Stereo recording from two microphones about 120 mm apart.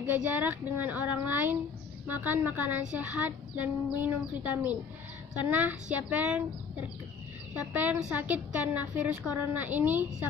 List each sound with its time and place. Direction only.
0.0 s a woman's voice: 15° right (ahead or behind)
7.7 s a woman's voice: 15° right (ahead or behind)